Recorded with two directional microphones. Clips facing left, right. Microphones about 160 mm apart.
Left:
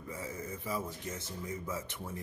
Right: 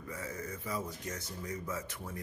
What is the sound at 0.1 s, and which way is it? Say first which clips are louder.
Speech: even; 25° left (ahead or behind).